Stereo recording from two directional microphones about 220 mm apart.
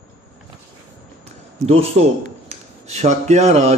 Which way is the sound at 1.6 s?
30° right (ahead or behind).